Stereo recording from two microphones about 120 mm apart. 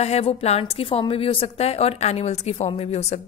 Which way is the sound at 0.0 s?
60° left (ahead or behind).